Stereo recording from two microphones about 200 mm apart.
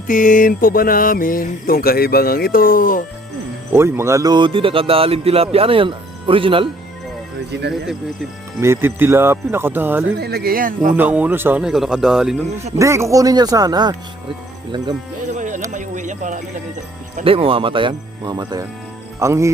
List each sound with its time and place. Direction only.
0.1 s speech: 40° left (ahead or behind)
3.7 s speech: 10° right (ahead or behind)
7.5 s speech: 60° right (ahead or behind)
8.6 s speech: 10° right (ahead or behind)
10.1 s speech: 50° right (ahead or behind)
10.9 s a man's voice: 10° right (ahead or behind)
12.8 s speech: 15° right (ahead or behind)
15.3 s music: 40° right (ahead or behind)
15.7 s a sound: 40° right (ahead or behind)
17.2 s speech: 25° right (ahead or behind)